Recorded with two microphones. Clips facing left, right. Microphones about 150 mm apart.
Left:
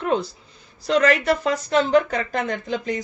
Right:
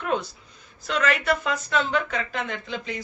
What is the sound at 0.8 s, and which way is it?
Speech, 35° left (ahead or behind).